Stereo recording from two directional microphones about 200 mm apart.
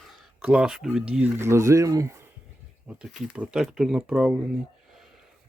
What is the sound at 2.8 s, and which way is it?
Speech, 5° right (ahead or behind).